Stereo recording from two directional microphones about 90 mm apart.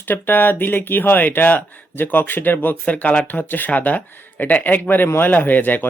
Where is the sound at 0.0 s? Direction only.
20° left (ahead or behind).